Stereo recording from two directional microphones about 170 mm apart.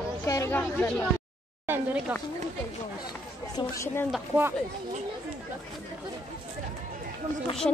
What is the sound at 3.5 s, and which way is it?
Speech, 15° left (ahead or behind).